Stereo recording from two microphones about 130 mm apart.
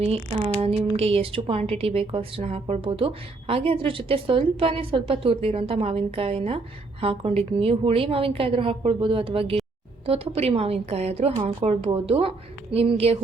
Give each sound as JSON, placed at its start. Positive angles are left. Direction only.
{"t": 0.0, "sound": "speech", "side_deg": -45}